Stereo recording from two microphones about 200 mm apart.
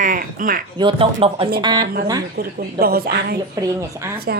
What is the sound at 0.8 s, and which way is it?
Speech, 25° right (ahead or behind).